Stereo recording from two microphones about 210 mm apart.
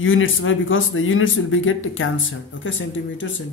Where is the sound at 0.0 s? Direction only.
70° left (ahead or behind).